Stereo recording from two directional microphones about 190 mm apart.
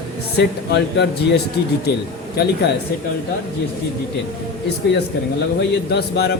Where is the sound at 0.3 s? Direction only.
60° left (ahead or behind).